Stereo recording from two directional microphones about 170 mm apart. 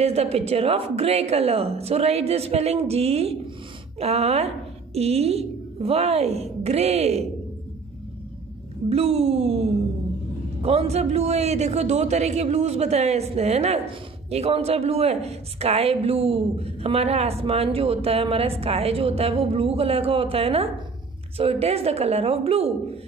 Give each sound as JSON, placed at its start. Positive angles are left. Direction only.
{"t": 0.0, "sound": "a woman's voice", "side_deg": -35}
{"t": 8.8, "sound": "a woman's voice", "side_deg": -35}